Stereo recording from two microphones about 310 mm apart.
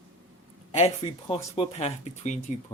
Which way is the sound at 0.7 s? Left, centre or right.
Centre.